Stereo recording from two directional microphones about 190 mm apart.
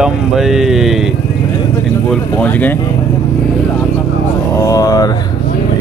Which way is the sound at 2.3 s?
10° left (ahead or behind).